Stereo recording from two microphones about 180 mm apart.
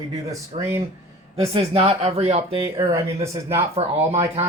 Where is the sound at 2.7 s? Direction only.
20° right (ahead or behind).